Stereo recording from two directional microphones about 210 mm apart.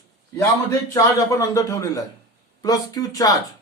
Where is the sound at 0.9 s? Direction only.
15° left (ahead or behind).